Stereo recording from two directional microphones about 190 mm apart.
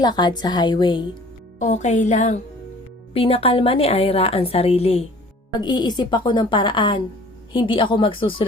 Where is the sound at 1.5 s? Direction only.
40° left (ahead or behind).